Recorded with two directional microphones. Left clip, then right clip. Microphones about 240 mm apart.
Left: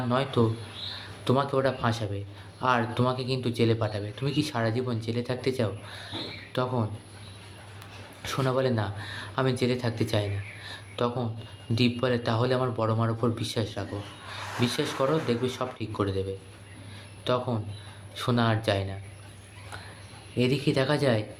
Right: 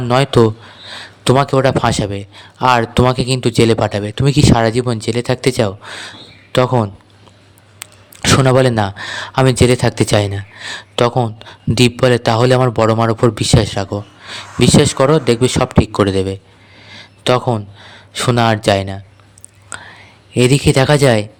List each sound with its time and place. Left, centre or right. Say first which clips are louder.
0.1 s a man's voice: right 15 dB; right
19.7 s whispering: right 13 dB; right
20.3 s a man's voice: right 14 dB; right